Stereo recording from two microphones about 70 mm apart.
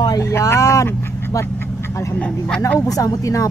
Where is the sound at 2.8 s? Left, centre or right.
Left.